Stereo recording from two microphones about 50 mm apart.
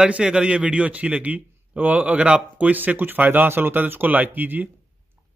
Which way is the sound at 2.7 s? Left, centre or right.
Right.